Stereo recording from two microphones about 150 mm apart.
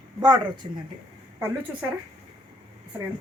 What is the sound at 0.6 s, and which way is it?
Speech, 35° right (ahead or behind).